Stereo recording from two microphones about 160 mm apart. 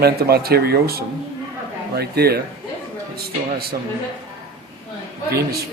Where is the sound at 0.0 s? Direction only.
75° right (ahead or behind).